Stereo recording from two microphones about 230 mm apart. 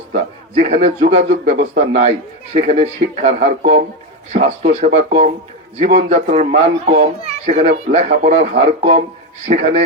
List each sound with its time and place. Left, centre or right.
0.1 s a man's voice: right